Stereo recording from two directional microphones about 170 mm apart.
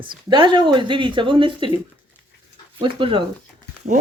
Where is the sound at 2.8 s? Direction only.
30° right (ahead or behind).